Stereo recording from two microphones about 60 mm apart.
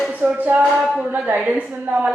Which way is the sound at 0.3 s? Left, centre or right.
Right.